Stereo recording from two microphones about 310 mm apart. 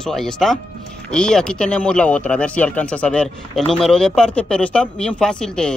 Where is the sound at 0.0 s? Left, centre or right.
Centre.